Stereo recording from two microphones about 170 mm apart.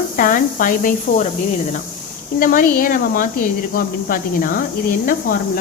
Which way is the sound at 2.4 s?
55° left (ahead or behind).